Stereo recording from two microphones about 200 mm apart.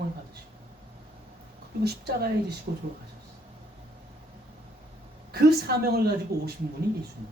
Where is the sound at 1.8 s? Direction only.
50° right (ahead or behind).